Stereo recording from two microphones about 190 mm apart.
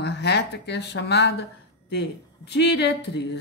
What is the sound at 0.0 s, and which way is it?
Speech, 60° left (ahead or behind).